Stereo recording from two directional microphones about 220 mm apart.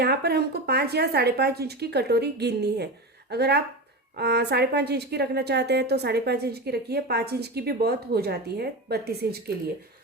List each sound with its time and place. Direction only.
0.0 s a woman's voice: 45° right (ahead or behind)